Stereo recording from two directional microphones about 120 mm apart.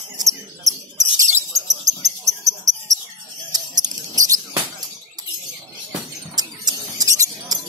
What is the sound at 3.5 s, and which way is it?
Mouse, 35° right (ahead or behind).